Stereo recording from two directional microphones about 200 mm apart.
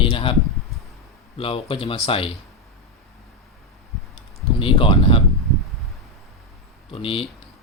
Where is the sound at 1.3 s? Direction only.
30° left (ahead or behind).